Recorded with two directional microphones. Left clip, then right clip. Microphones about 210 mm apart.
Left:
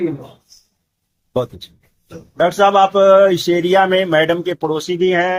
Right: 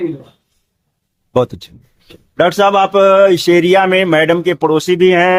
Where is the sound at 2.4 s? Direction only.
45° right (ahead or behind).